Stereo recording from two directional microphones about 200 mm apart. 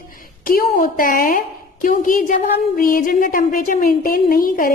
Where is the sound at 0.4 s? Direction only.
45° left (ahead or behind).